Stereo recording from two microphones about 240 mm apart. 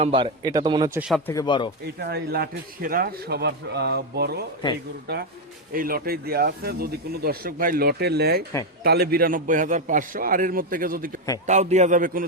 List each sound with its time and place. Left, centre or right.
0.0 s speech: centre
1.3 s speech: centre
2.0 s speech: right
5.7 s a man's voice: right